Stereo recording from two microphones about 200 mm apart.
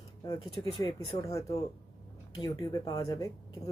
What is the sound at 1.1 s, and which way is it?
Speech, 15° left (ahead or behind).